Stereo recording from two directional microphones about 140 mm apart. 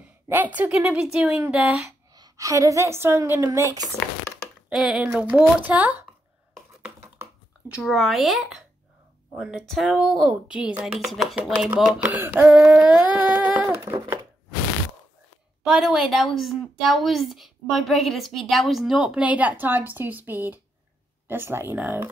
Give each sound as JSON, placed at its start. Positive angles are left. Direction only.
{"t": 0.0, "sound": "a sound", "side_deg": -15}
{"t": 0.6, "sound": "speech", "side_deg": -10}
{"t": 1.9, "sound": "a woman's voice", "side_deg": -25}
{"t": 4.6, "sound": "speech", "side_deg": -5}
{"t": 7.0, "sound": "a sound", "side_deg": -15}
{"t": 7.8, "sound": "a woman's voice", "side_deg": 0}
{"t": 15.6, "sound": "a woman's voice", "side_deg": -5}